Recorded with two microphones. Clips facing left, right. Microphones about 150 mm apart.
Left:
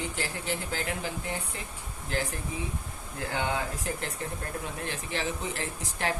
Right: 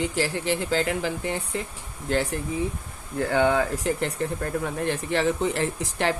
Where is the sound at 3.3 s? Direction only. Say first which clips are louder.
Right 10 dB; 85° right.